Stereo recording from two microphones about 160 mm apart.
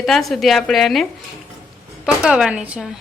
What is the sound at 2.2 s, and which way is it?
Speech, 5° right (ahead or behind).